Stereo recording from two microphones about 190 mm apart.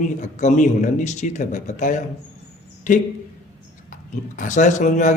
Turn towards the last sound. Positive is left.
turn(degrees=40)  # may be behind; listen again after turning